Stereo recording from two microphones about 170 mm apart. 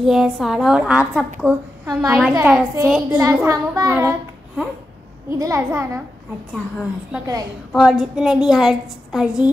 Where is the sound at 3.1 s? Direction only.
15° right (ahead or behind).